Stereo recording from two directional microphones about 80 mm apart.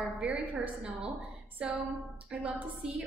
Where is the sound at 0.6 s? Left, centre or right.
Centre.